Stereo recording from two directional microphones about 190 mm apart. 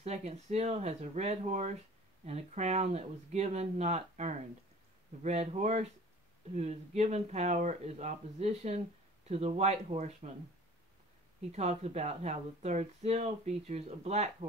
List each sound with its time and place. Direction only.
0.0 s speech: 35° right (ahead or behind)
11.5 s speech: 35° right (ahead or behind)